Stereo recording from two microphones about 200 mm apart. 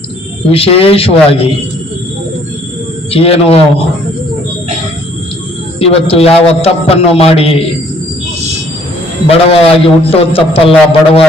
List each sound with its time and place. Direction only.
0.5 s a man's voice: 30° left (ahead or behind)
3.1 s a man's voice: 30° left (ahead or behind)
5.8 s a man's voice: 30° left (ahead or behind)
9.3 s a man's voice: 30° left (ahead or behind)